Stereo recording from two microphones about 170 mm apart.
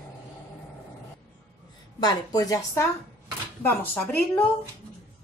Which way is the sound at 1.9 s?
20° left (ahead or behind).